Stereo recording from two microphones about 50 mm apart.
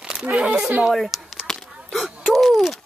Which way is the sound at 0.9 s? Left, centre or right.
Centre.